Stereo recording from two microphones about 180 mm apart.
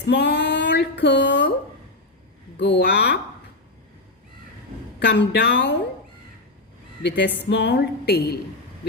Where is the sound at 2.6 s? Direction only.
70° left (ahead or behind).